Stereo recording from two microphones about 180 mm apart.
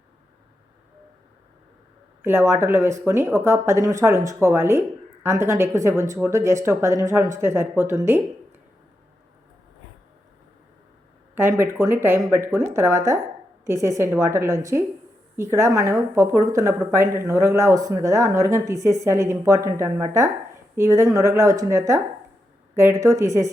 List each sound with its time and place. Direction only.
2.2 s speech: 15° right (ahead or behind)
11.3 s speech: 10° right (ahead or behind)